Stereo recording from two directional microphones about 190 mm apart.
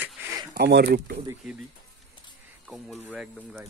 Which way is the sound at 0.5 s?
55° right (ahead or behind).